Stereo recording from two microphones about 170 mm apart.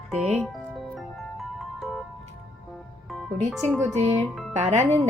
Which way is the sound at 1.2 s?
Centre (ahead or behind).